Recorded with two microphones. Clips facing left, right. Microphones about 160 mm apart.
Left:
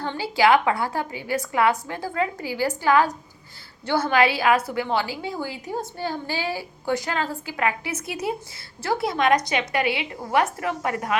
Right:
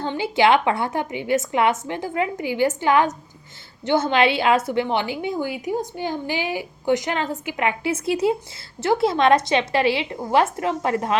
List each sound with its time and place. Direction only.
0.0 s a woman's voice: 20° right (ahead or behind)